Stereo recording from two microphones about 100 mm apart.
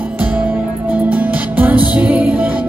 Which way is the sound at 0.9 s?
15° right (ahead or behind).